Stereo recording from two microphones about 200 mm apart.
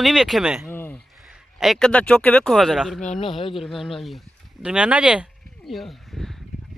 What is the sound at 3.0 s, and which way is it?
Speech, 35° left (ahead or behind).